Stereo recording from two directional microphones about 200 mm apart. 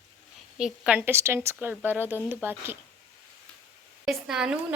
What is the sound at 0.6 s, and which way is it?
Speech, 5° right (ahead or behind).